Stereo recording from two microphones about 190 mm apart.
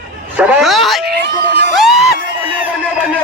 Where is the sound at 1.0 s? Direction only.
60° right (ahead or behind).